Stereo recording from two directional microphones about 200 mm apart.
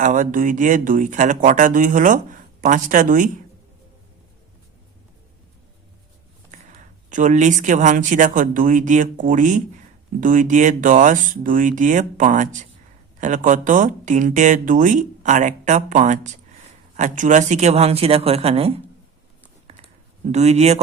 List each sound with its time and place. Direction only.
0.0 s speech: 40° right (ahead or behind)
6.5 s a sound: 35° right (ahead or behind)
7.1 s speech: 40° right (ahead or behind)
20.3 s speech: 35° right (ahead or behind)